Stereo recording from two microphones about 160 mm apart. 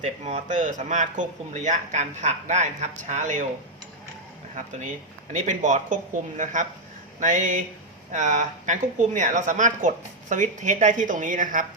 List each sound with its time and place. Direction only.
0.0 s a woman's voice: 45° right (ahead or behind)
5.3 s a woman's voice: 50° right (ahead or behind)